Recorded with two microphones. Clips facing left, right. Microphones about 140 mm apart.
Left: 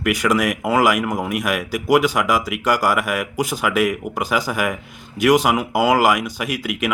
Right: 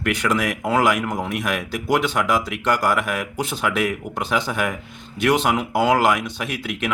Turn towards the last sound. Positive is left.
turn(degrees=10)  # may be behind; listen again after turning